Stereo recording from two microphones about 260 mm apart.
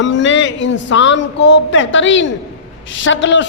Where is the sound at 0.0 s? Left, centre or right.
Left.